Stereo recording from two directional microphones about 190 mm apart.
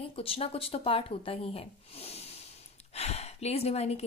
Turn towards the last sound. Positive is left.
turn(degrees=35)  # may be behind; listen again after turning